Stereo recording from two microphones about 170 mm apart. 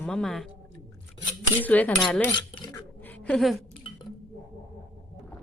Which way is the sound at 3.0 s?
10° left (ahead or behind).